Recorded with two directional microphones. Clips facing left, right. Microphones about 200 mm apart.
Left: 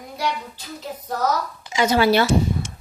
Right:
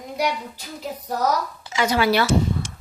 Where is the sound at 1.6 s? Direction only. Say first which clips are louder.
Left 3 dB; 20° left (ahead or behind).